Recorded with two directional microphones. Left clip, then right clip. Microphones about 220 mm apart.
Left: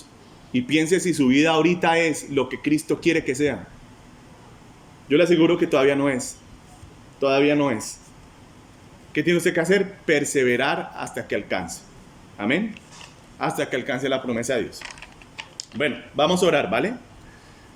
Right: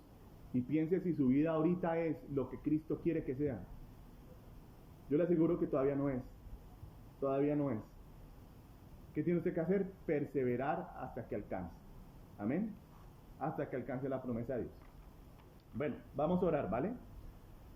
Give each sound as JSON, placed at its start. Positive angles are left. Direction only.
{"t": 0.5, "sound": "speech", "side_deg": 15}
{"t": 5.0, "sound": "speech", "side_deg": 20}
{"t": 7.2, "sound": "speech", "side_deg": 20}
{"t": 9.1, "sound": "speech", "side_deg": 15}
{"t": 15.8, "sound": "speech", "side_deg": 5}